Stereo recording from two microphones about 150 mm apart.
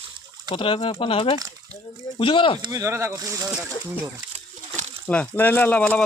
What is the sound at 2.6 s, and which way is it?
Speech, 25° right (ahead or behind).